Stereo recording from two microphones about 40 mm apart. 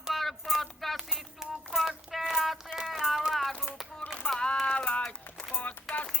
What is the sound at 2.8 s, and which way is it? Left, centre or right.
Music, centre.